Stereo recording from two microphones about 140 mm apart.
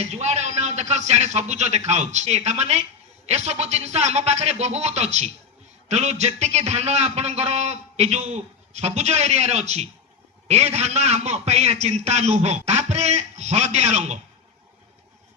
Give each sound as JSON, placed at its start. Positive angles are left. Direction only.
{"t": 0.0, "sound": "a man's voice", "side_deg": -50}